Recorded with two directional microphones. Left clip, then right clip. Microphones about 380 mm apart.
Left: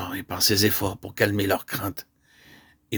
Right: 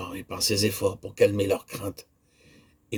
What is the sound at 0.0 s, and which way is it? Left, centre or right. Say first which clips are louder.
Speech: left 4 dB; left.